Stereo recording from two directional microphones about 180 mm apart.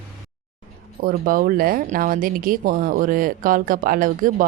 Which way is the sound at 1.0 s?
50° right (ahead or behind).